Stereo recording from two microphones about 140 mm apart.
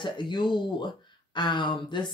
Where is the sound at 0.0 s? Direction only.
35° left (ahead or behind).